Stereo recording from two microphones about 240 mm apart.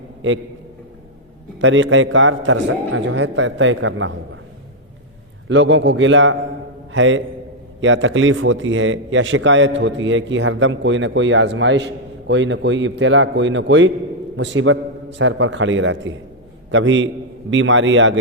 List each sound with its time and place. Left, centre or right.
0.2 s a man's voice: right
1.6 s a man's voice: right
5.5 s a man's voice: right